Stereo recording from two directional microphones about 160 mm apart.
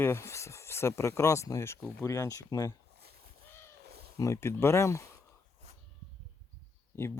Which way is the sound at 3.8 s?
85° right.